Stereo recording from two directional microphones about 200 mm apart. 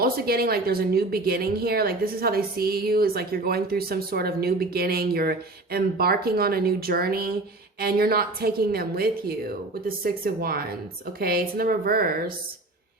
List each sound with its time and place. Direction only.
0.0 s a woman's voice: 50° right (ahead or behind)